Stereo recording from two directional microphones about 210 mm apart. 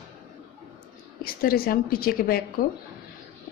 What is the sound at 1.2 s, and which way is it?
A woman's voice, 45° left (ahead or behind).